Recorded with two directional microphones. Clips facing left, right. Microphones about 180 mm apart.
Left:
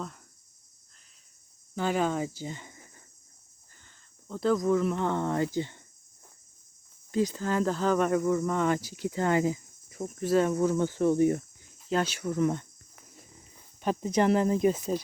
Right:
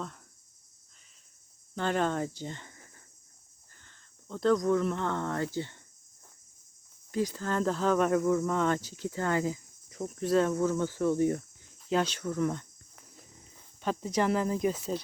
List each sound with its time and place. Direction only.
1.7 s speech: 5° left (ahead or behind)
3.8 s a sound: 5° left (ahead or behind)
4.9 s speech: 15° left (ahead or behind)
7.1 s speech: 20° left (ahead or behind)
7.4 s speech: 5° left (ahead or behind)
10.0 s cricket: 5° left (ahead or behind)
10.5 s speech: 15° left (ahead or behind)
11.9 s speech: 5° left (ahead or behind)
13.8 s speech: 20° left (ahead or behind)